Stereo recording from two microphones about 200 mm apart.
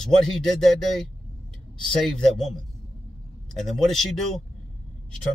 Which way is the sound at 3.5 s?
Centre (ahead or behind).